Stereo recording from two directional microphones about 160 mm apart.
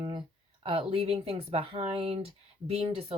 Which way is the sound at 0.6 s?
35° right (ahead or behind).